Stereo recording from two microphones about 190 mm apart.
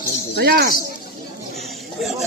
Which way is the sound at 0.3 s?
55° right (ahead or behind).